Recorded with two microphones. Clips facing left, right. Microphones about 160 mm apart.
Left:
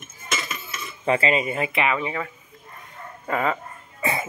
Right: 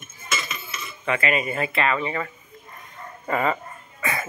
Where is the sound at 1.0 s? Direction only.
30° left (ahead or behind); by 3.5 s centre (ahead or behind).